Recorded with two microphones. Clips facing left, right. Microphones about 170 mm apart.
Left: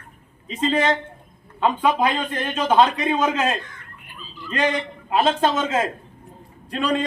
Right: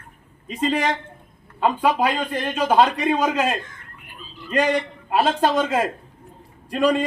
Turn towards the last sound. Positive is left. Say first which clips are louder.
# right 3 dB
turn(degrees=-10)  # may be behind; listen again after turning